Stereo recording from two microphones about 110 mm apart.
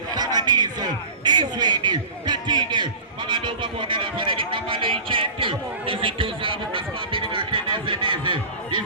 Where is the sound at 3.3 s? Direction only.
45° right (ahead or behind).